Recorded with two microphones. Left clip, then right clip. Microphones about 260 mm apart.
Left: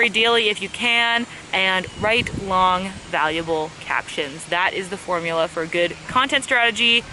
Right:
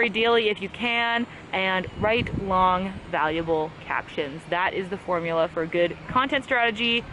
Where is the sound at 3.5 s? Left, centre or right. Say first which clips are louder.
Left 2 dB; right.